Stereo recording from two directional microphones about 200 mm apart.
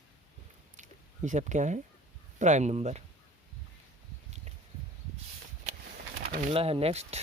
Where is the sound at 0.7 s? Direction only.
40° right (ahead or behind).